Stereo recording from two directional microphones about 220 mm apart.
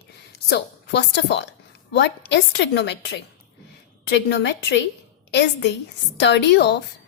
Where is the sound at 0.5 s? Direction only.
55° left (ahead or behind).